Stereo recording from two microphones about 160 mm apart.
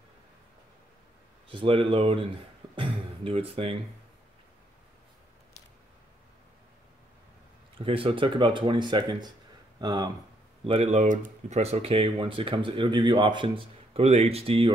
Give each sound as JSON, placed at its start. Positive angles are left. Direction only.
{"t": 1.5, "sound": "speech", "side_deg": -35}
{"t": 7.8, "sound": "speech", "side_deg": -35}
{"t": 10.6, "sound": "speech", "side_deg": -35}